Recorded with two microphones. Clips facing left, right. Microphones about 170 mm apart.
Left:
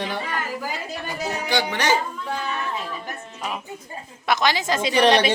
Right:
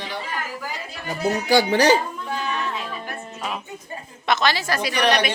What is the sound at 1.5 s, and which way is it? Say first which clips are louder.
Speech: right 7 dB; 35° right (ahead or behind).